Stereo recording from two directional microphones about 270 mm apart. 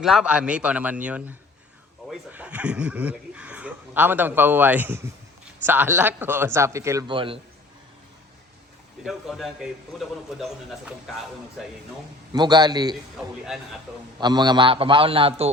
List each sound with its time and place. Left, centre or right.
0.0 s a man's voice: centre
9.0 s speech: centre
12.3 s a man's voice: centre
13.1 s speech: centre
14.2 s a man's voice: centre